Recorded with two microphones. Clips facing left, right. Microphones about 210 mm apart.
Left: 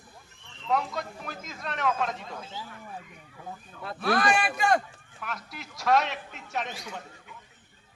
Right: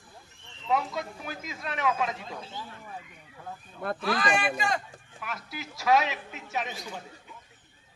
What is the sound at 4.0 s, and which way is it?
Speech, 60° left (ahead or behind).